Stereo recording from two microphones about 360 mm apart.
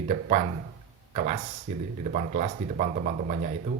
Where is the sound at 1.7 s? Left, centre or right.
Right.